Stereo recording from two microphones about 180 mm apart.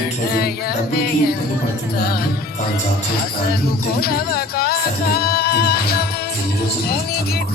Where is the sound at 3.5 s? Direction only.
60° left (ahead or behind).